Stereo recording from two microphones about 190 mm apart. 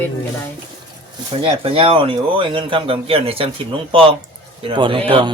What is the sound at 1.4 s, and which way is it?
Speech, 30° right (ahead or behind).